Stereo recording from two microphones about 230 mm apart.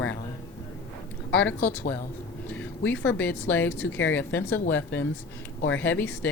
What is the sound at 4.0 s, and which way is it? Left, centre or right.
Speech, left.